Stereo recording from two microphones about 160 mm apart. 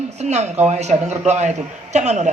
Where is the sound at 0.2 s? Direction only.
45° right (ahead or behind).